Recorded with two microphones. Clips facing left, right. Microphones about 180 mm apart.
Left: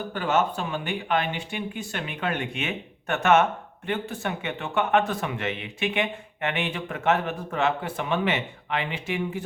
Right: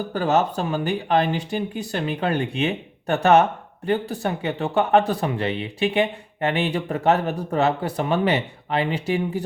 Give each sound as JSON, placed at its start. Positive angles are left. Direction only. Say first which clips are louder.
{"t": 0.1, "sound": "speech", "louder": "right 4 dB", "side_deg": -35}